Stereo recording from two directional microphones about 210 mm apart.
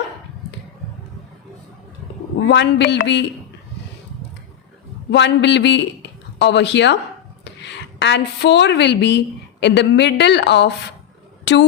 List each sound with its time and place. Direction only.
2.5 s speech: 55° left (ahead or behind)
5.1 s a man's voice: 55° left (ahead or behind)